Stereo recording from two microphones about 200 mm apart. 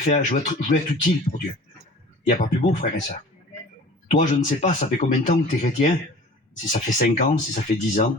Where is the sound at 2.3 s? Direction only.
40° left (ahead or behind).